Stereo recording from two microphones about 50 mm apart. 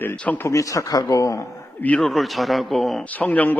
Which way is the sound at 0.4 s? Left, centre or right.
Left.